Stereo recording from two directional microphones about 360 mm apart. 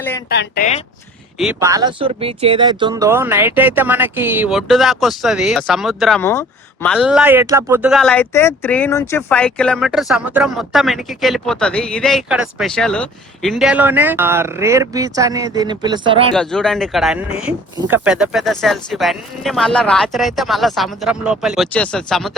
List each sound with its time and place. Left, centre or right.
0.3 s a woman's voice: left
1.4 s speech: centre
16.3 s speech: centre